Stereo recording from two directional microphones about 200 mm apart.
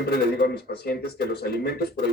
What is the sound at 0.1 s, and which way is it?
Speech, 55° left (ahead or behind).